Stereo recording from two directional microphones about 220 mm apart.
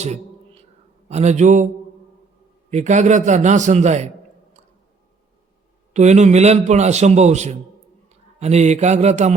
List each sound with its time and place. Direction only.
1.0 s a man's voice: 30° right (ahead or behind)
2.6 s a man's voice: 35° right (ahead or behind)
5.9 s a man's voice: 30° right (ahead or behind)